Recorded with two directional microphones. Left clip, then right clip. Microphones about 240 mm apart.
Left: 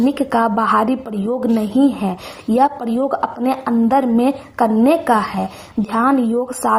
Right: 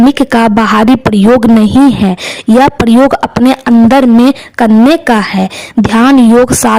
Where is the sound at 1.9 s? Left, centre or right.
Right.